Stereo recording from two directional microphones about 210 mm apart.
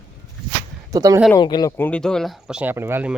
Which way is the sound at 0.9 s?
15° right (ahead or behind).